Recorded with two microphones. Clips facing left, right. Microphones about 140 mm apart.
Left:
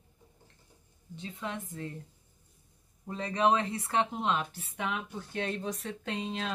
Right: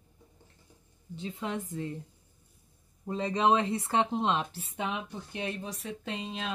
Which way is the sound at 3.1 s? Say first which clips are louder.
Right 1 dB; 20° right (ahead or behind).